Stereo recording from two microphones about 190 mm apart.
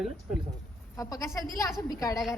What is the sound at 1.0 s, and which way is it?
A woman's voice, 20° left (ahead or behind).